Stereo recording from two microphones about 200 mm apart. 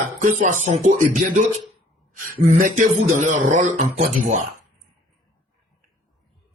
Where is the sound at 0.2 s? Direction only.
40° right (ahead or behind).